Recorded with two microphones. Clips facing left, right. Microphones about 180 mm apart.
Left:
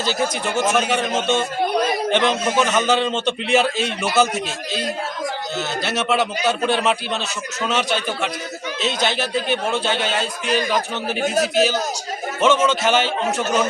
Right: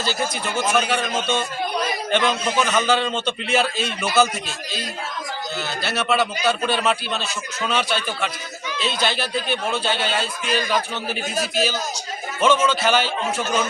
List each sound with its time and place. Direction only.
0.5 s a man's voice: 20° left (ahead or behind)
5.8 s a man's voice: 20° left (ahead or behind)
11.2 s a man's voice: 65° left (ahead or behind)
12.4 s a man's voice: 20° left (ahead or behind)